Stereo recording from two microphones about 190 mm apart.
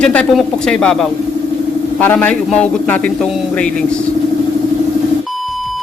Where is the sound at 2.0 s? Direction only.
10° left (ahead or behind).